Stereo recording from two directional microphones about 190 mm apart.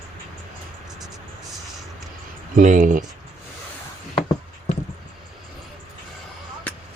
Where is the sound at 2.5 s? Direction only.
45° right (ahead or behind).